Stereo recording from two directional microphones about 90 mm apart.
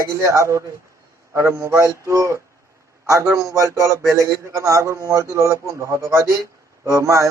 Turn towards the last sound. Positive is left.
turn(degrees=-35)  # may be behind; listen again after turning